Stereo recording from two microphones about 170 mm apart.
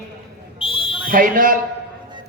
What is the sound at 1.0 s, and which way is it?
Speech, 55° right (ahead or behind).